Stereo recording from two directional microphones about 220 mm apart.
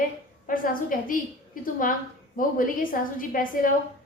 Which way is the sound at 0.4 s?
40° left (ahead or behind).